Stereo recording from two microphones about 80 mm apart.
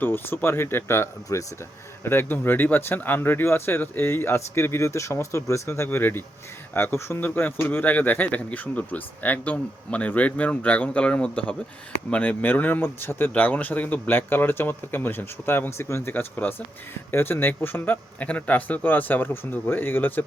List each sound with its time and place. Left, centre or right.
0.0 s speech: left